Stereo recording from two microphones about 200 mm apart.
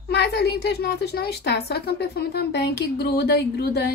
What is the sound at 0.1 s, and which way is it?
A woman's voice, 55° left (ahead or behind).